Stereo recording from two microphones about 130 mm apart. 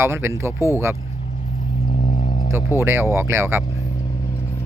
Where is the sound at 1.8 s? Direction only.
70° left (ahead or behind).